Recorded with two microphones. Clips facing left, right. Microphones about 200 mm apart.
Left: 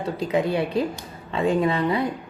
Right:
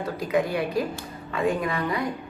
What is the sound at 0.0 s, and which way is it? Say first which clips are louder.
A woman's voice: left 2 dB; 25° left (ahead or behind).